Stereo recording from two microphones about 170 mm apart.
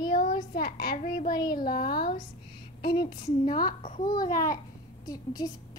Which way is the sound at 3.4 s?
55° left (ahead or behind).